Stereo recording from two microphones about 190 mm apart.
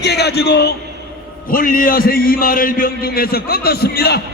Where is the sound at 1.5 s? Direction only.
45° left (ahead or behind).